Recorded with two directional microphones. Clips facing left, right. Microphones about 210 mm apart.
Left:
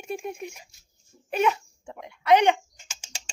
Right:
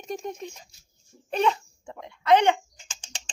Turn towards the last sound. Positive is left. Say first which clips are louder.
# even
turn(degrees=10)  # may be behind; listen again after turning